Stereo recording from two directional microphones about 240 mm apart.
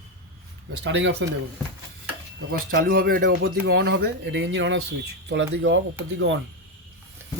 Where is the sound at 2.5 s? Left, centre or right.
Right.